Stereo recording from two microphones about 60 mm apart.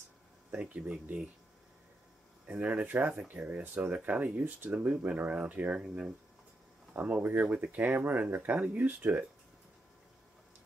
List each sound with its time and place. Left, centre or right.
0.5 s speech: right
2.5 s speech: right